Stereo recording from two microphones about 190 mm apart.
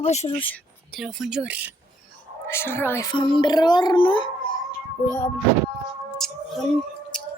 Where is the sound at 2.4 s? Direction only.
15° left (ahead or behind).